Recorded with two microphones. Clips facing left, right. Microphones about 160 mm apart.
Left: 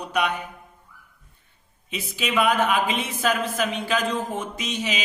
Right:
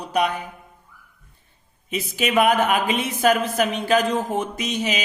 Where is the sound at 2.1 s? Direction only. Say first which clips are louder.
Right 3 dB; 50° right (ahead or behind).